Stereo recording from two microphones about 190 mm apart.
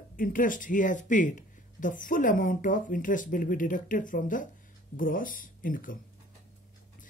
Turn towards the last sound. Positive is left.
turn(degrees=45)  # may be behind; listen again after turning